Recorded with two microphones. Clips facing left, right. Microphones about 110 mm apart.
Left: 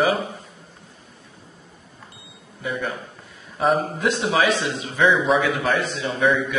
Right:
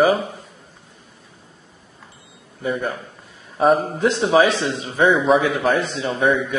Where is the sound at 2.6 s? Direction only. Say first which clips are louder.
Right 4 dB; 40° right (ahead or behind).